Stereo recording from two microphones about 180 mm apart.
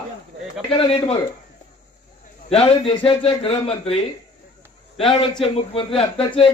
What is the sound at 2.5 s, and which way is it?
A man's voice, 35° left (ahead or behind).